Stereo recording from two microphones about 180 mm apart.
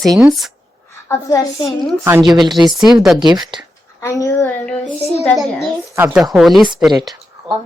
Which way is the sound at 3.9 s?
15° left (ahead or behind).